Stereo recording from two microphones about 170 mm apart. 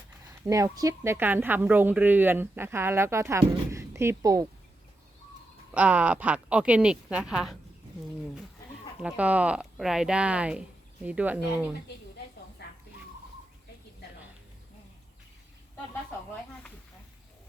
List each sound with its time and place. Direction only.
0.4 s speech: 20° right (ahead or behind)
5.7 s speech: 10° right (ahead or behind)
9.0 s speech: 5° right (ahead or behind)
12.6 s dog: 70° left (ahead or behind)